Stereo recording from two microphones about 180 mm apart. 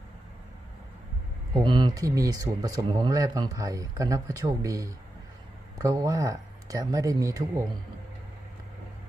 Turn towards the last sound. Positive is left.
turn(degrees=-20)  # may be behind; listen again after turning